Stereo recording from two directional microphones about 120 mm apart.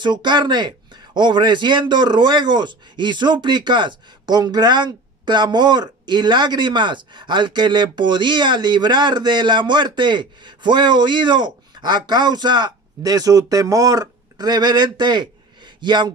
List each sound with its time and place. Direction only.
0.0 s speech: 40° right (ahead or behind)